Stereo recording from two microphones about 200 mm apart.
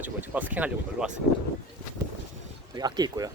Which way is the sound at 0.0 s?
10° right (ahead or behind).